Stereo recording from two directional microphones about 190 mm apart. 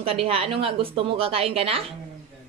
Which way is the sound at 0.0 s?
30° right (ahead or behind).